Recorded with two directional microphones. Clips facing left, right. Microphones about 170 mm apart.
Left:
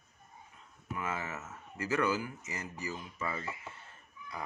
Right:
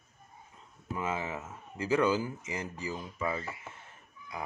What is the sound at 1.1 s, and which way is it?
Speech, 15° right (ahead or behind).